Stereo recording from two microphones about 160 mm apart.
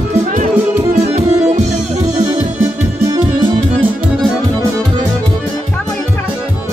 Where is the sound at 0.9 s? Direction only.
40° right (ahead or behind).